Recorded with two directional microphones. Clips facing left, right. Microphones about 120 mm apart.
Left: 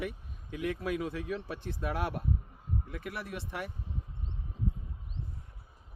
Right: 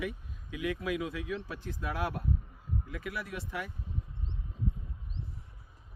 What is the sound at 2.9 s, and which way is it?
Speech, 50° left (ahead or behind).